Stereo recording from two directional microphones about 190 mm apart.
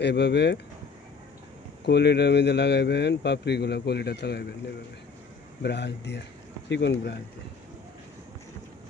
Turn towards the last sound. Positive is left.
turn(degrees=65)  # may be behind; listen again after turning